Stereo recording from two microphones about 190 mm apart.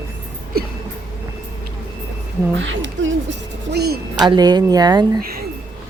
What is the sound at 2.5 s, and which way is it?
Speech, 75° right (ahead or behind).